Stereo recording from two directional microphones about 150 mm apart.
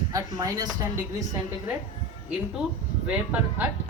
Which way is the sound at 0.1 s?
25° right (ahead or behind).